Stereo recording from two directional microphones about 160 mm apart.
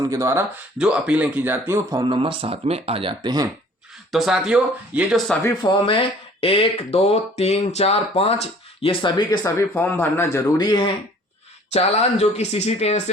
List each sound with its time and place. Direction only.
0.0 s speech: 20° right (ahead or behind)
0.8 s speech: 5° right (ahead or behind); by 3.2 s 35° right (ahead or behind)
3.2 s speech: 25° right (ahead or behind)
4.1 s speech: centre (ahead or behind)
5.4 s a man's voice: 20° left (ahead or behind)
5.8 s speech: 35° left (ahead or behind); by 10.4 s 15° left (ahead or behind)
10.6 s a man's voice: 30° left (ahead or behind)
11.7 s speech: 40° left (ahead or behind)